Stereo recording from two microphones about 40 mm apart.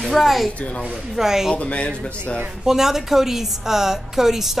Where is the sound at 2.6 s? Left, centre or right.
Centre.